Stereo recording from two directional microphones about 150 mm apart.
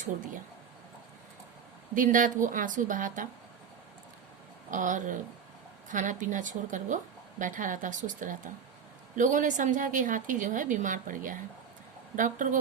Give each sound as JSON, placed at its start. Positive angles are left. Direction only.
{"t": 2.0, "sound": "a woman's voice", "side_deg": -60}
{"t": 4.7, "sound": "a woman's voice", "side_deg": -60}